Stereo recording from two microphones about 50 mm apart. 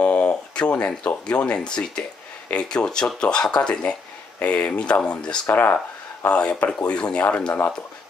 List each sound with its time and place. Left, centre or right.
0.0 s speech: left
4.4 s speech: left
5.5 s speech: left
6.2 s speech: left
7.2 s speech: left